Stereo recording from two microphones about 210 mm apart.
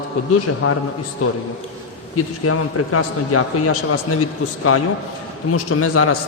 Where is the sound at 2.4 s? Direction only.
90° left.